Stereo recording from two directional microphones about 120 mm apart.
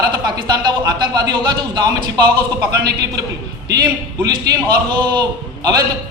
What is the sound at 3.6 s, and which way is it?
A man's voice, 35° right (ahead or behind).